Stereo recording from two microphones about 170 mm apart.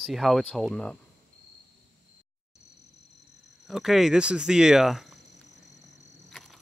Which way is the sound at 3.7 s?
Centre (ahead or behind).